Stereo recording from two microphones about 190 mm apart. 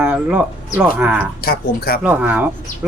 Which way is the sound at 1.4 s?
55° left (ahead or behind).